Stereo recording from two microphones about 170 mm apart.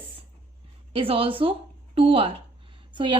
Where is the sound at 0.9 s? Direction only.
35° right (ahead or behind).